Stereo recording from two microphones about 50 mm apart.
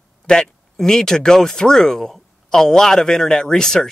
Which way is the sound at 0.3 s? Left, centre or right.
Centre.